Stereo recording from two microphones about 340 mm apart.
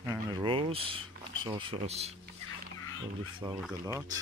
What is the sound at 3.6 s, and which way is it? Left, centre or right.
Speech, centre.